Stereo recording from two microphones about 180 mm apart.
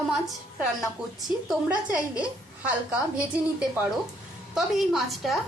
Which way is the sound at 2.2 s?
5° right (ahead or behind).